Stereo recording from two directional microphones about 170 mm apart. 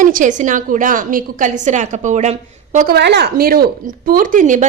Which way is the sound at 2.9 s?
85° right.